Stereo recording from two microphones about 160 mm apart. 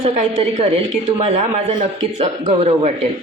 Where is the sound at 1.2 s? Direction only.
40° right (ahead or behind).